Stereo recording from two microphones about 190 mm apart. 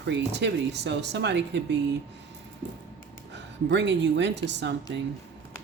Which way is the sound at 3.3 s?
70° right (ahead or behind).